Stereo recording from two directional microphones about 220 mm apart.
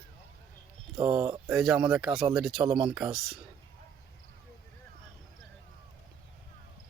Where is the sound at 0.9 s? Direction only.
20° right (ahead or behind).